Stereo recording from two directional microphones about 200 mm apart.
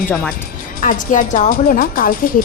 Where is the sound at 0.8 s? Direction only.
40° left (ahead or behind).